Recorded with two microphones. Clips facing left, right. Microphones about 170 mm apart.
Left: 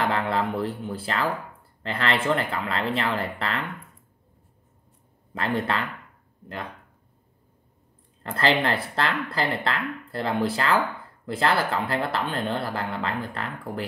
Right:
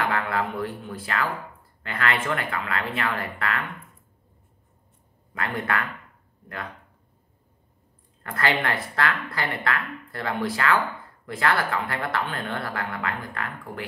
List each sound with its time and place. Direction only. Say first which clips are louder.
0.0 s speech: left 1 dB; 30° left (ahead or behind)
5.3 s speech: left 2 dB; 30° left (ahead or behind)
8.2 s speech: left 3 dB; 25° left (ahead or behind)